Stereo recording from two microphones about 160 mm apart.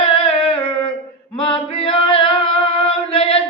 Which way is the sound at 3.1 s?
35° left (ahead or behind).